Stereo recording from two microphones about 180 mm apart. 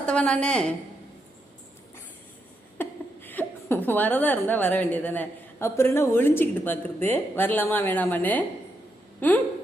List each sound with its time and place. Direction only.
0.0 s a woman's voice: 5° left (ahead or behind)
2.7 s a woman's voice: 10° left (ahead or behind)